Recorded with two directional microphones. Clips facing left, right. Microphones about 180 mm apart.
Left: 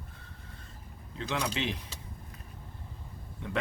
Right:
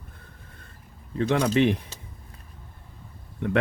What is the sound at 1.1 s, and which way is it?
Speech, 60° right (ahead or behind).